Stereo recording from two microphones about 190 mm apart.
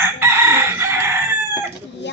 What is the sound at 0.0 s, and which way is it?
Chicken, 10° right (ahead or behind).